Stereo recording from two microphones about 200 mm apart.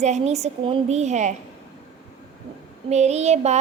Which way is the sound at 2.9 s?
35° right (ahead or behind).